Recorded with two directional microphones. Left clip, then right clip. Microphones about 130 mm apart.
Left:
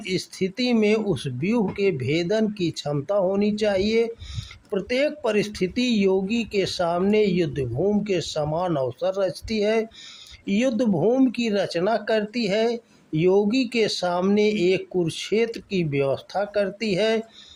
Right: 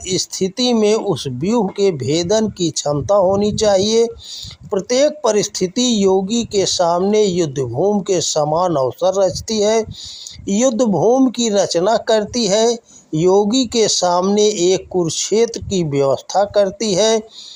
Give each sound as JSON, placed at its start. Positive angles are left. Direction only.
{"t": 0.1, "sound": "speech", "side_deg": -40}
{"t": 11.3, "sound": "speech", "side_deg": -35}